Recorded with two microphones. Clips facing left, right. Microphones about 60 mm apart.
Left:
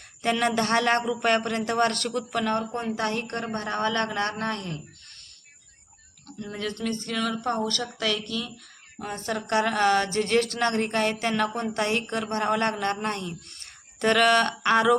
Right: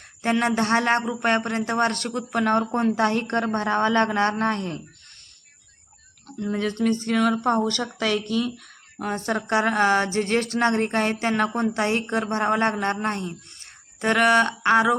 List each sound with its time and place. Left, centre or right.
0.2 s a man's voice: right
3.5 s a woman's voice: right
6.2 s speech: right
7.1 s a man's voice: right